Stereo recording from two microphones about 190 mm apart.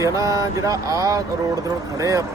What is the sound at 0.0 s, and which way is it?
Speech, 20° right (ahead or behind).